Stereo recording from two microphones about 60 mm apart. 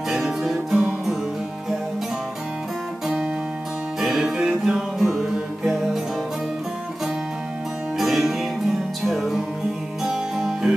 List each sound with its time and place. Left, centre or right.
0.1 s music: centre
4.0 s music: centre
8.0 s music: centre